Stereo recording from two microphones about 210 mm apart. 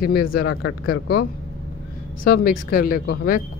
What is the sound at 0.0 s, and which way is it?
Speech, 45° left (ahead or behind).